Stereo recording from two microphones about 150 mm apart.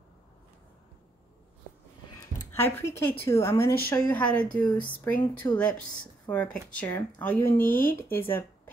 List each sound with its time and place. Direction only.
2.5 s speech: 15° left (ahead or behind)